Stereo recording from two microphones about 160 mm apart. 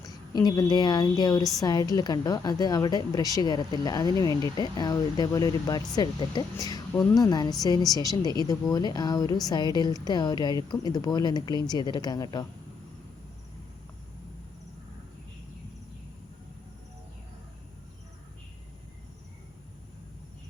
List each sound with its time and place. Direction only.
0.0 s a woman's voice: 25° left (ahead or behind)